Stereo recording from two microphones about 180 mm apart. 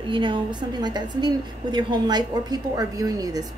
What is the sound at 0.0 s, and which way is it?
A woman's voice, 25° right (ahead or behind).